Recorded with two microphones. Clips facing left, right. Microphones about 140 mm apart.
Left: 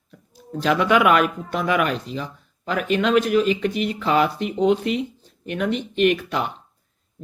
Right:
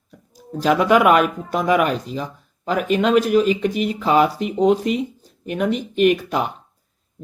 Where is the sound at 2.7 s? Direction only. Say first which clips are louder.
Right 3 dB; 5° right (ahead or behind).